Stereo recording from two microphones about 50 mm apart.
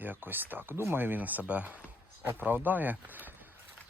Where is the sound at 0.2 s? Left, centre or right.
Right.